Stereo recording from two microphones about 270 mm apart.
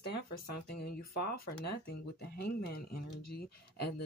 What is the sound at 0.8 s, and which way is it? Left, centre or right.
Speech, left.